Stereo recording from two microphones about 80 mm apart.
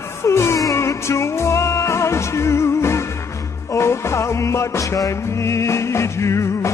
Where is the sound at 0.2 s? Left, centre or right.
Left.